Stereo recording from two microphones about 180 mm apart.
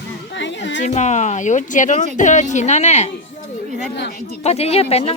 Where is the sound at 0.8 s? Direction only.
40° left (ahead or behind).